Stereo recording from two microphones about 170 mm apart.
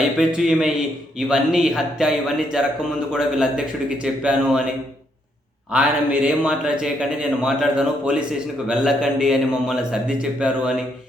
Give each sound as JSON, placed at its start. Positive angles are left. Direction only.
{"t": 0.3, "sound": "speech", "side_deg": -5}
{"t": 5.7, "sound": "speech", "side_deg": -5}